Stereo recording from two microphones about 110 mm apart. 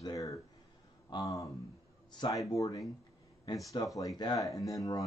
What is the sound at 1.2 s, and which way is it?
Speech, 30° left (ahead or behind).